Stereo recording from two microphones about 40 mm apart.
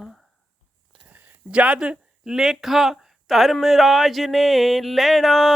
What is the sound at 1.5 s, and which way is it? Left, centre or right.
Speech, right.